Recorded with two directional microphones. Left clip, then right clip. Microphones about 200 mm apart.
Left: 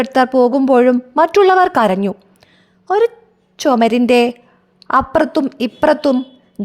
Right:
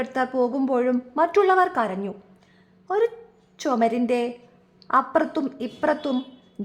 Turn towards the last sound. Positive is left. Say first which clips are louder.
# left 11 dB
turn(degrees=40)  # may be behind; listen again after turning